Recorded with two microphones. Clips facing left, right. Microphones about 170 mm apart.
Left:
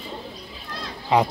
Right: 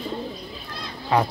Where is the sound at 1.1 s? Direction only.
20° left (ahead or behind).